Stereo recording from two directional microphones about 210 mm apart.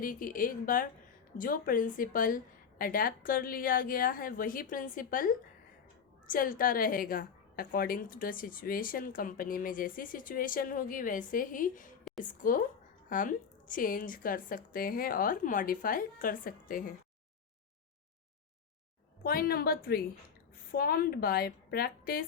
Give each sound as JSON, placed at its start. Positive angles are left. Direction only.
{"t": 0.0, "sound": "a woman's voice", "side_deg": 40}
{"t": 19.2, "sound": "a woman's voice", "side_deg": 45}